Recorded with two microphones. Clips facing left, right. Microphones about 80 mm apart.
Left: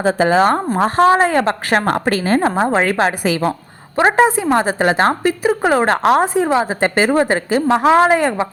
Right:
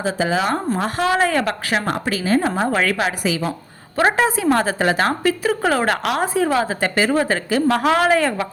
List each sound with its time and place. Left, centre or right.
0.0 s speech: left
1.7 s a woman's voice: left
2.6 s a woman's voice: left
6.3 s a woman's voice: left